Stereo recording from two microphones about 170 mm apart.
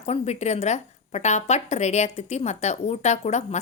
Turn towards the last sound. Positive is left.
turn(degrees=40)  # may be behind; listen again after turning